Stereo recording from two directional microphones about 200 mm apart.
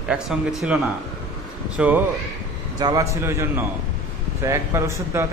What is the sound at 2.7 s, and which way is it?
A man's voice, 20° right (ahead or behind).